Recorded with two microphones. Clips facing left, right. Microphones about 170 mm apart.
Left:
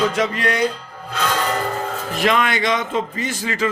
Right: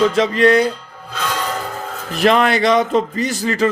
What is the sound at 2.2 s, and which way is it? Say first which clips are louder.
A man's voice: right 5 dB; 35° right (ahead or behind).